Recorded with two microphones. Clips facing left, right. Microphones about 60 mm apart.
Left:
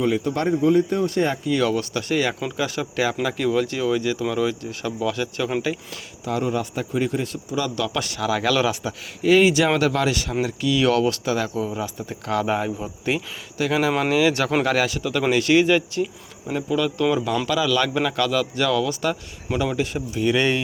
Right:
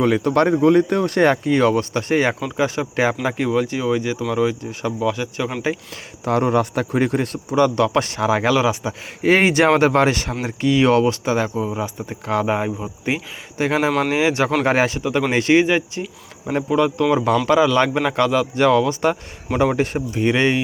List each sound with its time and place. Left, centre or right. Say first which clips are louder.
0.0 s speech: right 5 dB; right
1.5 s a man's voice: right 5 dB; right
6.2 s a man's voice: right 6 dB; right
9.2 s a man's voice: right 2 dB; right; by 13.2 s centre
13.6 s a man's voice: right 2 dB; right